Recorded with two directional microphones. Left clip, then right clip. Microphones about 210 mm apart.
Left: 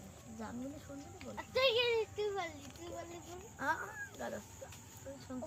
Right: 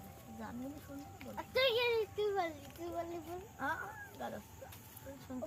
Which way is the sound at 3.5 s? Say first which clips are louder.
Left 3 dB; 25° left (ahead or behind).